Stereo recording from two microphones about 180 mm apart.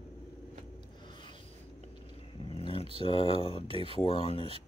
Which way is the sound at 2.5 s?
30° left (ahead or behind).